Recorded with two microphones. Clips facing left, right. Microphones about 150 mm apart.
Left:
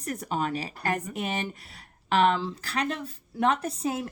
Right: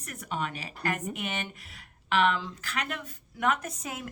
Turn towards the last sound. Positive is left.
turn(degrees=30)  # may be behind; listen again after turning